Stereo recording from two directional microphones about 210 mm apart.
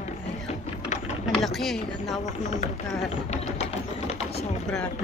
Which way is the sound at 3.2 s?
30° left (ahead or behind).